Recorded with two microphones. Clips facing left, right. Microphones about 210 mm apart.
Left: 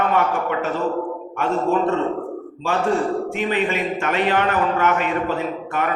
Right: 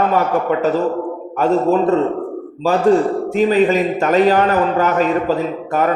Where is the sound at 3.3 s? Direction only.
40° right (ahead or behind).